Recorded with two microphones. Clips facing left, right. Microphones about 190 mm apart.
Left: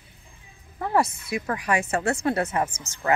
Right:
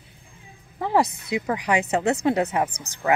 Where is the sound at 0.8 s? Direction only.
15° right (ahead or behind).